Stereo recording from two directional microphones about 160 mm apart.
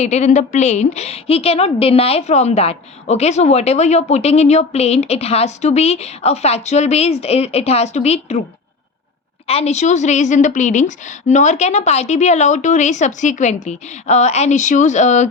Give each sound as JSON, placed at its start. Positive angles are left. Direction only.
{"t": 0.0, "sound": "a woman's voice", "side_deg": 45}
{"t": 9.5, "sound": "a woman's voice", "side_deg": 40}